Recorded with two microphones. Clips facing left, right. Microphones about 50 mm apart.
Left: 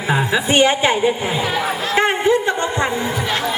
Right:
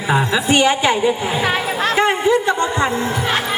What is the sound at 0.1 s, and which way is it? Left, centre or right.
Speech, centre.